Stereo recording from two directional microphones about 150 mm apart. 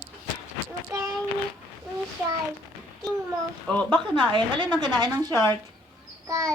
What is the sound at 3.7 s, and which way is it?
Speech, 5° left (ahead or behind).